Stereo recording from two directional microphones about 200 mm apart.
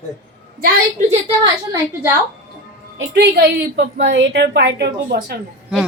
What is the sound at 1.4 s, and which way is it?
Speech, 15° right (ahead or behind).